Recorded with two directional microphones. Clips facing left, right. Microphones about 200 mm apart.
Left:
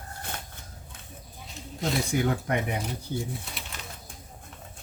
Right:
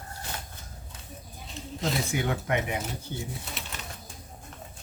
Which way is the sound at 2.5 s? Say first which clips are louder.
Even; 40° left (ahead or behind).